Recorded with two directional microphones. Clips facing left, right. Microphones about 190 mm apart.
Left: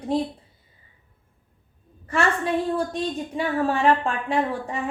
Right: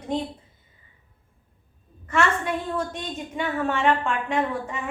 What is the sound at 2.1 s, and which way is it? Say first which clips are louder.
A woman's voice: left 1 dB; 35° left (ahead or behind).